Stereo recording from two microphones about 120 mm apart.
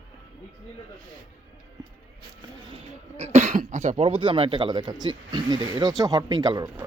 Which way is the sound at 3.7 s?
70° right (ahead or behind).